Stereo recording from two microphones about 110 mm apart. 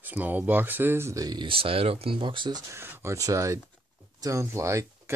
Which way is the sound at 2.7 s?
20° right (ahead or behind).